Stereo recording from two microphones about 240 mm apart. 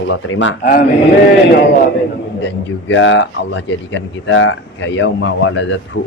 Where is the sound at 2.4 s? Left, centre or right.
Left.